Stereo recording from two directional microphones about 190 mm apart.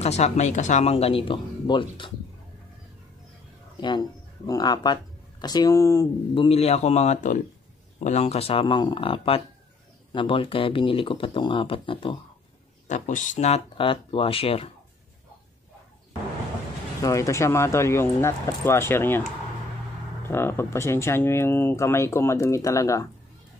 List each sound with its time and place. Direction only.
0.0 s speech: 35° left (ahead or behind)
3.8 s speech: 20° left (ahead or behind)
12.8 s speech: 40° left (ahead or behind)
17.0 s speech: 15° left (ahead or behind)
20.2 s speech: 10° left (ahead or behind)